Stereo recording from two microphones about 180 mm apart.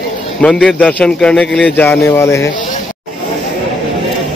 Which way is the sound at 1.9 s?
15° left (ahead or behind).